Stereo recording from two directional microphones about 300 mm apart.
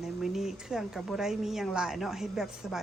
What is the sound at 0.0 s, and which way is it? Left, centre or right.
A woman's voice, centre.